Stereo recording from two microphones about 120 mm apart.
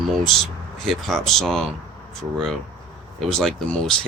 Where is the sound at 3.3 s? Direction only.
5° left (ahead or behind).